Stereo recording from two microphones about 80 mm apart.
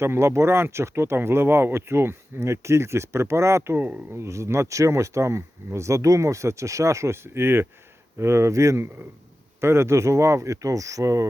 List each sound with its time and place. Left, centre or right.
0.0 s speech: right
3.8 s speech: centre
4.1 s speech: right